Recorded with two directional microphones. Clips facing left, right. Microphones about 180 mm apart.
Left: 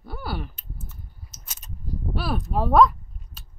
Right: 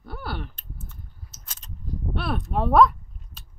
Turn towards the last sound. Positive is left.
turn(degrees=0)  # may be behind; listen again after turning